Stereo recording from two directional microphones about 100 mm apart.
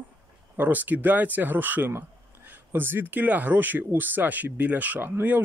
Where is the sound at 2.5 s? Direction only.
20° right (ahead or behind).